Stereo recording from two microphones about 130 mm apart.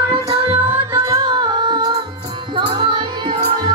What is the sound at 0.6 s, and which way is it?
Music, 20° right (ahead or behind).